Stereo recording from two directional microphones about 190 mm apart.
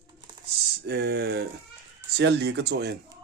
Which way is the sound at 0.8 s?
60° right (ahead or behind).